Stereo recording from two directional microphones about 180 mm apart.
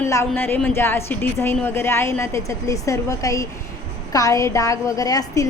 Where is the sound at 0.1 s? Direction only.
15° left (ahead or behind).